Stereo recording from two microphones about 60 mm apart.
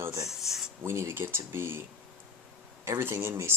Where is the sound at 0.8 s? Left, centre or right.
Right.